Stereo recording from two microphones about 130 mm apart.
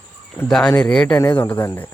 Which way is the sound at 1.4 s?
20° left (ahead or behind).